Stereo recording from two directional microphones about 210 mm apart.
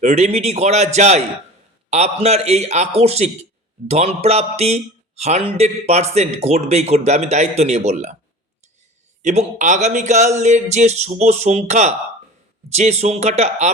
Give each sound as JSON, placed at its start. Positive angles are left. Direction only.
{"t": 0.0, "sound": "speech", "side_deg": -30}
{"t": 9.2, "sound": "speech", "side_deg": -30}